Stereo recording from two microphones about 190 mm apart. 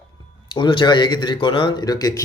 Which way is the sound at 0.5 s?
25° left (ahead or behind).